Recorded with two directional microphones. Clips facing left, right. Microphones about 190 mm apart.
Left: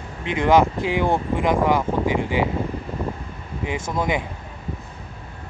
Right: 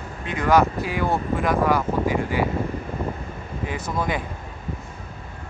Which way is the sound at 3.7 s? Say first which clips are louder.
Left 3 dB; 20° left (ahead or behind).